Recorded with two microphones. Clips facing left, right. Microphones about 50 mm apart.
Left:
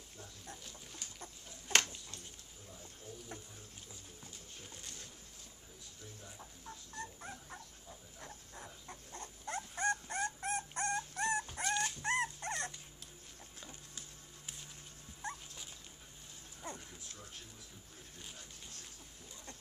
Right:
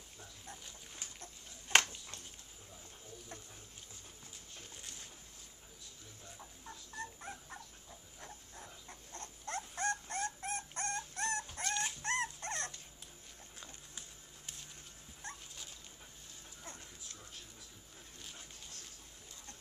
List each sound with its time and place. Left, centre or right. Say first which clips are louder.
0.5 s dog: even; centre
1.7 s dog: right 3 dB; right
4.6 s a sound: even; centre
6.6 s dog: right 1 dB; centre
8.2 s a sound: left 1 dB; centre
9.1 s dog: even; centre
15.2 s dog: left 5 dB; left
16.6 s dog: left 6 dB; left